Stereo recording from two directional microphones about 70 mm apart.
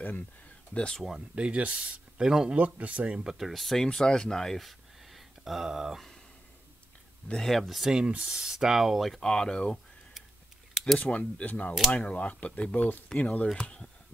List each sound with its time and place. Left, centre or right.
0.7 s speech: centre
1.3 s speech: centre
2.5 s speech: right
3.3 s speech: centre
7.3 s speech: centre
9.2 s speech: centre
11.0 s speech: centre